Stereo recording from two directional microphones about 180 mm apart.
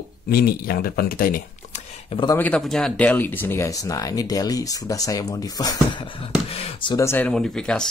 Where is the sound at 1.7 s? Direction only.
35° left (ahead or behind).